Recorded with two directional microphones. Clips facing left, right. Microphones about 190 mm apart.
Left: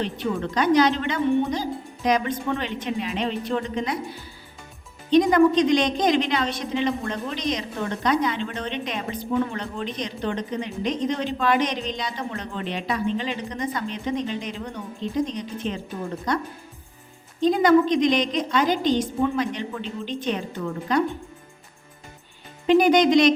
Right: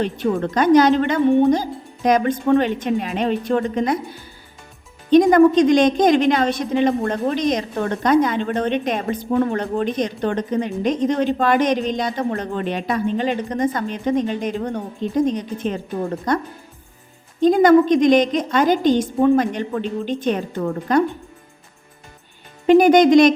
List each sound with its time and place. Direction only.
0.0 s a woman's voice: 50° right (ahead or behind)
5.1 s a woman's voice: 50° right (ahead or behind)
17.4 s a woman's voice: 50° right (ahead or behind)
22.6 s a woman's voice: 50° right (ahead or behind)